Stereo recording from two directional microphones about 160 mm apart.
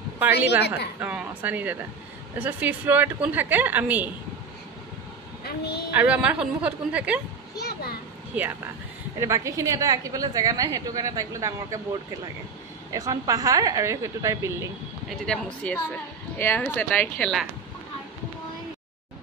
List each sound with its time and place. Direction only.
0.6 s a woman's voice: 90° left
1.0 s a woman's voice: 10° right (ahead or behind)
5.4 s a woman's voice: 90° left
5.9 s a woman's voice: 10° right (ahead or behind)
7.6 s a sound: 75° left (ahead or behind)
8.3 s a woman's voice: 10° right (ahead or behind)
12.9 s a woman's voice: 20° right (ahead or behind)
15.2 s speech: 10° left (ahead or behind)